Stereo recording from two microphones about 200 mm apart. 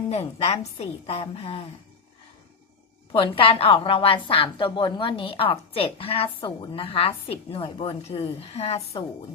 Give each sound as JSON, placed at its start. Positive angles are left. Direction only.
{"t": 0.1, "sound": "a woman's voice", "side_deg": 30}
{"t": 3.1, "sound": "a woman's voice", "side_deg": 25}